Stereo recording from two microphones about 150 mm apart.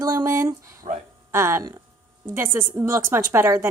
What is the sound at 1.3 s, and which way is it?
A woman's voice, 15° right (ahead or behind).